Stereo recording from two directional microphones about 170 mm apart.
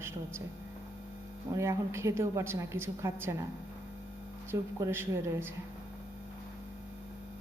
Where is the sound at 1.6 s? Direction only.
15° right (ahead or behind).